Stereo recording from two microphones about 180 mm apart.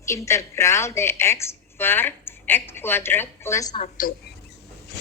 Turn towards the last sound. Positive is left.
turn(degrees=50)  # may be behind; listen again after turning